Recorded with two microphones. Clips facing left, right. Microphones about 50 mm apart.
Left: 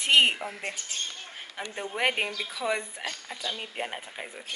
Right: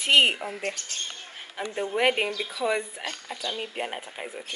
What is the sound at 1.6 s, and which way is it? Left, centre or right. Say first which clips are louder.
Speech: right 4 dB; centre.